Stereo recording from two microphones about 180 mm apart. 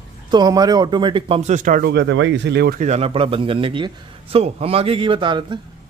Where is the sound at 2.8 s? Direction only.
35° right (ahead or behind).